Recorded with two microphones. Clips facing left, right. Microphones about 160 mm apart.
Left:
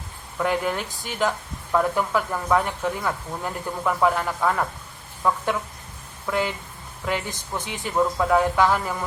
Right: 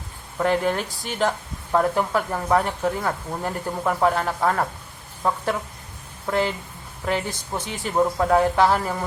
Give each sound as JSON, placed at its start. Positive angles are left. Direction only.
{"t": 0.3, "sound": "speech", "side_deg": -40}